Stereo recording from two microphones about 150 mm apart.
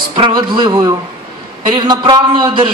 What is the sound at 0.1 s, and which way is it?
A woman's voice, 30° right (ahead or behind).